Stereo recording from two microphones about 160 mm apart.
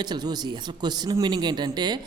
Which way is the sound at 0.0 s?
25° right (ahead or behind).